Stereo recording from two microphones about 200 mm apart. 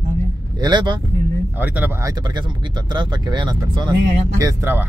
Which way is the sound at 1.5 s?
10° right (ahead or behind).